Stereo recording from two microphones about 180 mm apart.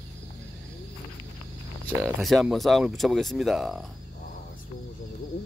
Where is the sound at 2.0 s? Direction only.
Centre (ahead or behind).